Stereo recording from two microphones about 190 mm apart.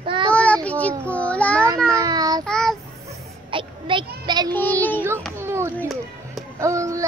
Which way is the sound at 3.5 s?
25° right (ahead or behind).